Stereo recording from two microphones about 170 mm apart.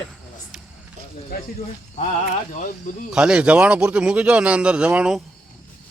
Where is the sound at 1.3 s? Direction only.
60° left (ahead or behind).